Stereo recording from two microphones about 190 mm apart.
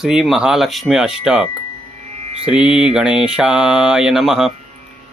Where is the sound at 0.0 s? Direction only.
5° right (ahead or behind).